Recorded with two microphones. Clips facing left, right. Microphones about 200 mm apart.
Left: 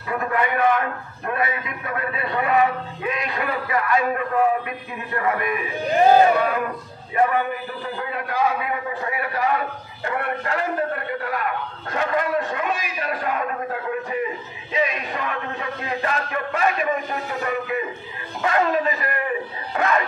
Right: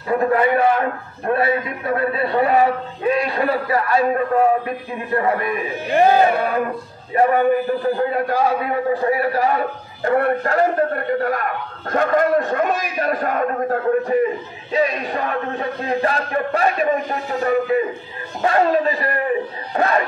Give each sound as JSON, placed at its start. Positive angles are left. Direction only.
{"t": 0.2, "sound": "a man's voice", "side_deg": -30}
{"t": 7.2, "sound": "a man's voice", "side_deg": -40}